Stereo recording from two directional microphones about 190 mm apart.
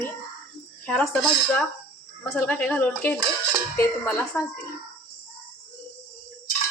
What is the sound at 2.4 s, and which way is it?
Speech, 5° left (ahead or behind).